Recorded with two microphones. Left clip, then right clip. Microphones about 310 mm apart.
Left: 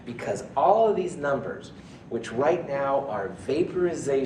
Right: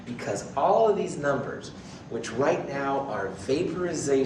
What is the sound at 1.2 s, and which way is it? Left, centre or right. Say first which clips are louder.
Speech: even; left.